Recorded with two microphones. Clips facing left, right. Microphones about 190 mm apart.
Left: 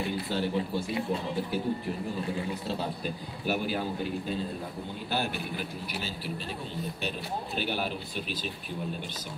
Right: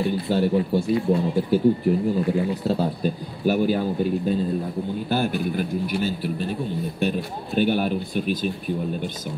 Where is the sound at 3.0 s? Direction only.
40° right (ahead or behind).